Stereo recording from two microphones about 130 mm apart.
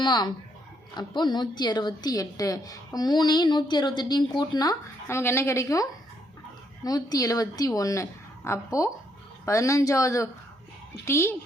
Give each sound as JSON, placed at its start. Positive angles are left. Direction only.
{"t": 0.0, "sound": "a woman's voice", "side_deg": 30}